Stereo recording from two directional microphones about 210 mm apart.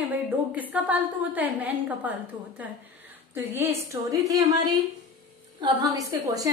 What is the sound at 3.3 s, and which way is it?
A woman's voice, 10° right (ahead or behind).